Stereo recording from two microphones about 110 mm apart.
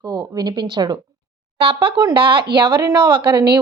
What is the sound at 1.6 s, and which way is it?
A woman's voice, 55° right (ahead or behind).